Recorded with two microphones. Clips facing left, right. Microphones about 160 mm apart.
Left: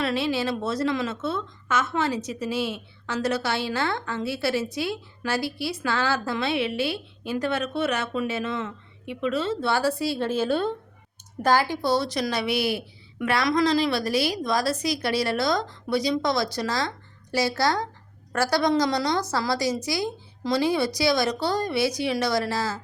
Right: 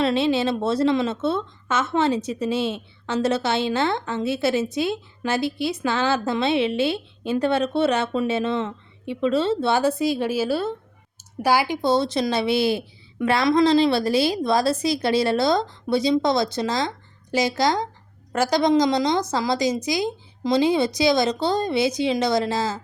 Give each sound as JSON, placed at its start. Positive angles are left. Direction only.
{"t": 0.0, "sound": "a woman's voice", "side_deg": -25}